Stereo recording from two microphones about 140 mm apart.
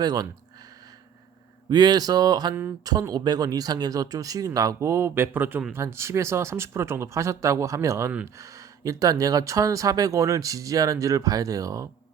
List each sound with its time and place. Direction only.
0.0 s speech: 30° right (ahead or behind)
1.7 s speech: 30° right (ahead or behind)